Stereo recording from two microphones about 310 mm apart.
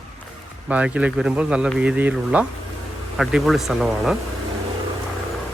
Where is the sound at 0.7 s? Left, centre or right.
Centre.